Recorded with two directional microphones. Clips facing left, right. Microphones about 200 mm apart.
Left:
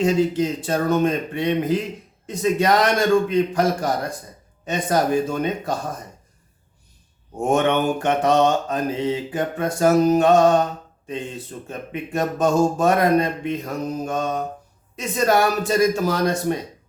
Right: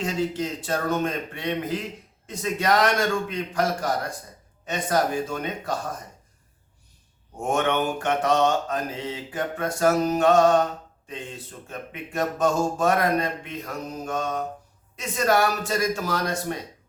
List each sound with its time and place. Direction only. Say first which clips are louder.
0.0 s speech: left 7 dB; 15° left (ahead or behind)
2.2 s mantra: left 6 dB; 20° left (ahead or behind)
7.5 s mantra: left 5 dB; 20° left (ahead or behind)
11.7 s mantra: left 6 dB; 20° left (ahead or behind)